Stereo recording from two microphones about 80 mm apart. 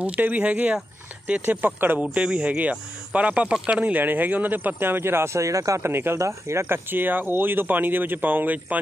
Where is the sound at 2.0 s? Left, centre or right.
Centre; by 5.9 s right.